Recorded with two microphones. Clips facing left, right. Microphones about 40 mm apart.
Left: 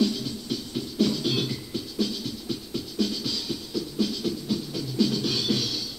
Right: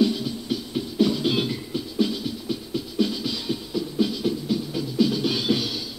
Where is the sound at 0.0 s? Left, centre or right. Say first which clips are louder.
Right 3 dB; centre.